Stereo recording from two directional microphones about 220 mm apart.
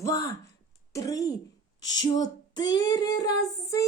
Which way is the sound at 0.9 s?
15° left (ahead or behind).